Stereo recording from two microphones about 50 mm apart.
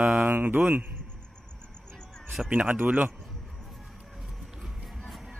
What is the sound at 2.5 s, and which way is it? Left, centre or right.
Mantra, right.